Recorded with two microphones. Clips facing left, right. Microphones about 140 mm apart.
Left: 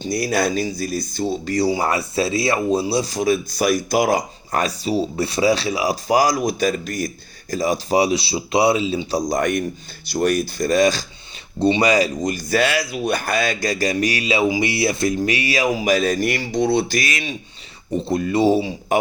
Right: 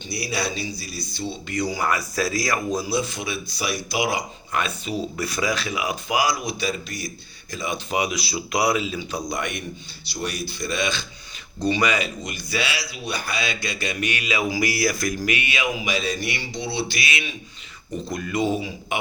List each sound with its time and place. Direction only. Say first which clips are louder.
0.0 s speech: left 8 dB; 45° left (ahead or behind)
11.6 s speech: left 6 dB; 30° left (ahead or behind)
18.0 s speech: left 7 dB; 30° left (ahead or behind)